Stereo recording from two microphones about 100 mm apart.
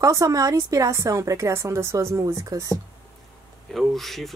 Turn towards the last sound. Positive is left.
turn(degrees=0)  # may be behind; listen again after turning